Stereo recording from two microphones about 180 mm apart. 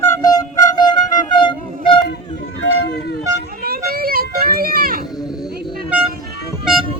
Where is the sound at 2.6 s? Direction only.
75° left (ahead or behind).